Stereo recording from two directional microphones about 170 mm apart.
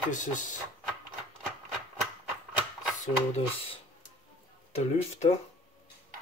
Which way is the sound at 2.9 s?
40° left (ahead or behind).